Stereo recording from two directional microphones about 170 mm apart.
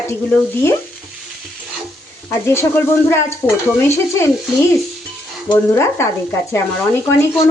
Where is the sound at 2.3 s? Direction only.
15° left (ahead or behind).